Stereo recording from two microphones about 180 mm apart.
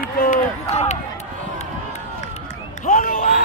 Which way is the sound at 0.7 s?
40° left (ahead or behind).